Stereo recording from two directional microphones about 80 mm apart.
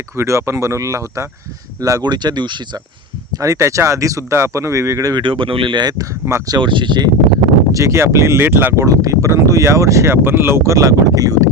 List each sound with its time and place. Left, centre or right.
0.2 s speech: right
2.0 s speech: right
3.3 s speech: right
5.1 s speech: right
6.5 s speech: right
7.7 s speech: right
8.8 s speech: right